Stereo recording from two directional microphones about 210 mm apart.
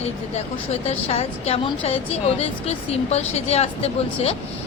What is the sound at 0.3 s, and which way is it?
A woman's voice, 30° left (ahead or behind).